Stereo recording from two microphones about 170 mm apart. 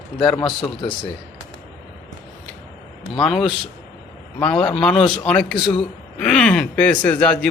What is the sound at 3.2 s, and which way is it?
Speech, 5° left (ahead or behind).